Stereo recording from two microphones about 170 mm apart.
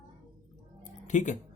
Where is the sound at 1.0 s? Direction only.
45° left (ahead or behind).